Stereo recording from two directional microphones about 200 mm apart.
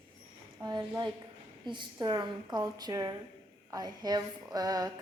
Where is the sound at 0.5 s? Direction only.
20° right (ahead or behind).